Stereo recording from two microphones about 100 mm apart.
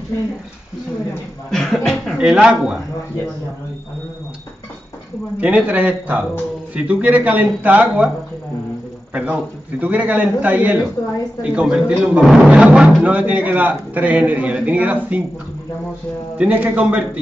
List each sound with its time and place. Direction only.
1.5 s a man's voice: 5° left (ahead or behind)
5.4 s a man's voice: 15° right (ahead or behind)
9.1 s a man's voice: 15° right (ahead or behind)
16.3 s a man's voice: 15° right (ahead or behind)